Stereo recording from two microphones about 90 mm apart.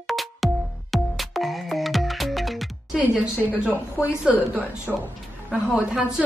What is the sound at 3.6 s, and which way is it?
A woman's voice, 10° right (ahead or behind).